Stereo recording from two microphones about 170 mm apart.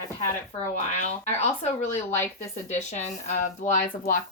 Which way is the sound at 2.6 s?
40° left (ahead or behind).